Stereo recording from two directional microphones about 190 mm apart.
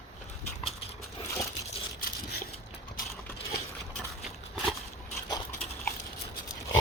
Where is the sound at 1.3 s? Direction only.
15° left (ahead or behind).